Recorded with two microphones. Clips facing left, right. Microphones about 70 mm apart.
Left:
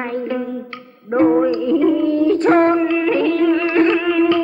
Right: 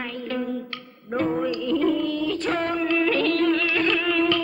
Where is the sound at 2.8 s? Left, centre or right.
Centre.